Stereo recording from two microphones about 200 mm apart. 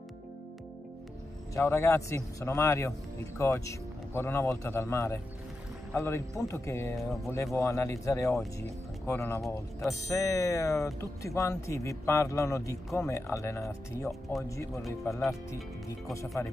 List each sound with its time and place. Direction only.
1.5 s speech: 15° left (ahead or behind)
9.4 s speech: centre (ahead or behind)
10.0 s speech: 15° left (ahead or behind)